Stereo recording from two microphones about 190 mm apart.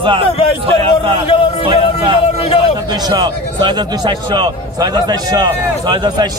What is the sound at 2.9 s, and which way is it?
A man's voice, 20° right (ahead or behind).